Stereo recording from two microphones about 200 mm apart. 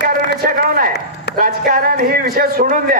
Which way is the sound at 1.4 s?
45° right (ahead or behind).